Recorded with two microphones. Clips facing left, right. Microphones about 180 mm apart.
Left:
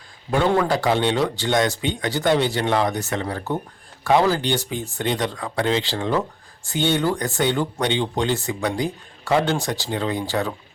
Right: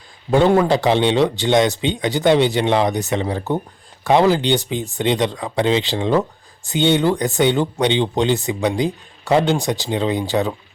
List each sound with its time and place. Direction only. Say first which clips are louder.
0.3 s speech: right 5 dB; 20° right (ahead or behind)